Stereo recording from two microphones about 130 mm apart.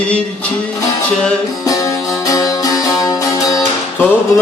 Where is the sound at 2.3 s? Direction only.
25° left (ahead or behind).